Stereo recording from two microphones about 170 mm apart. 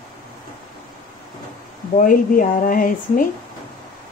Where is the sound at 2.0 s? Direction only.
55° left (ahead or behind).